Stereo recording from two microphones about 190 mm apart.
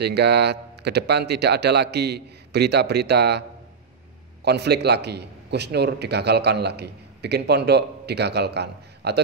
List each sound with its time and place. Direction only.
0.0 s a man's voice: 60° right (ahead or behind)
4.5 s a man's voice: 60° right (ahead or behind)